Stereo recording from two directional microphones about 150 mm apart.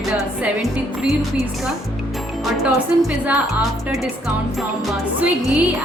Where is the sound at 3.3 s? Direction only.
10° right (ahead or behind).